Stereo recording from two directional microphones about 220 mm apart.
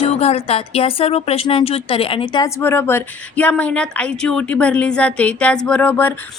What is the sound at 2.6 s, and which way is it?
Speech, 10° left (ahead or behind).